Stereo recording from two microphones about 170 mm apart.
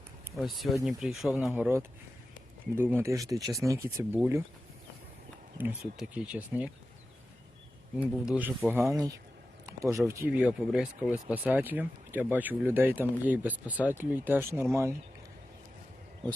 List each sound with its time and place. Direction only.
0.3 s speech: centre (ahead or behind)
5.5 s speech: 10° right (ahead or behind)
8.0 s speech: 5° right (ahead or behind)